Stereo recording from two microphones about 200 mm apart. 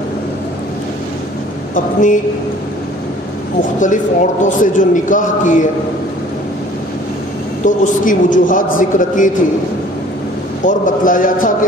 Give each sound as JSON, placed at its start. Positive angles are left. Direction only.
{"t": 3.8, "sound": "a man's voice", "side_deg": 40}
{"t": 7.6, "sound": "a man's voice", "side_deg": 40}
{"t": 10.6, "sound": "a man's voice", "side_deg": 40}